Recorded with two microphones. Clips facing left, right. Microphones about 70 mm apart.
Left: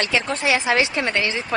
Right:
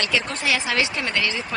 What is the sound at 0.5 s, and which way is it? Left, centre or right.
Speech, left.